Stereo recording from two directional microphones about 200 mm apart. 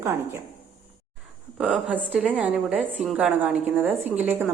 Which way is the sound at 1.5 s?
5° right (ahead or behind).